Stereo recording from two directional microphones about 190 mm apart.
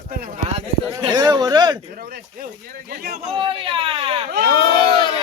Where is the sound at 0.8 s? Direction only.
20° right (ahead or behind).